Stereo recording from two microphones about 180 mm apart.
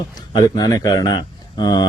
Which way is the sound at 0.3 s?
25° left (ahead or behind).